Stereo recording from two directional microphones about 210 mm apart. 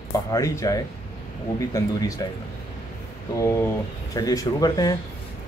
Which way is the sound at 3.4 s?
15° left (ahead or behind).